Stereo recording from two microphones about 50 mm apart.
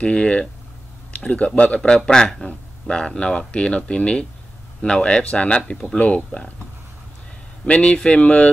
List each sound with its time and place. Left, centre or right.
0.0 s speech: left
1.8 s a man's voice: centre
7.6 s speech: left